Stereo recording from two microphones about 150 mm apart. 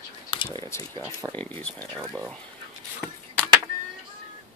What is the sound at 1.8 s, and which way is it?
Speech, 20° right (ahead or behind).